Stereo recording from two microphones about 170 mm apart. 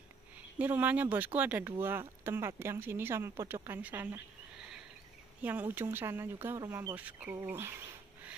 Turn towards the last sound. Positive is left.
turn(degrees=-15)  # may be behind; listen again after turning